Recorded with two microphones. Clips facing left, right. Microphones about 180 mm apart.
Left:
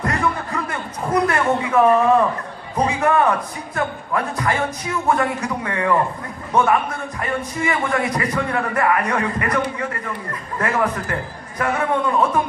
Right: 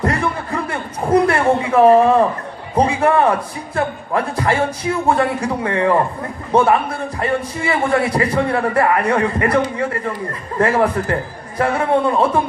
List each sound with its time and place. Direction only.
0.0 s a sound: 30° right (ahead or behind)
2.7 s a man's voice: 30° right (ahead or behind)
10.6 s a man's voice: 30° right (ahead or behind)